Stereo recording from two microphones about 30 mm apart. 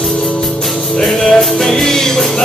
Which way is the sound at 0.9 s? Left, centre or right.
Centre.